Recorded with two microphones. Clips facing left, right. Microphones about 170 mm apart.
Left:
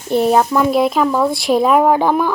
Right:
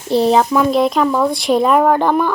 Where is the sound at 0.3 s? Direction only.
5° left (ahead or behind).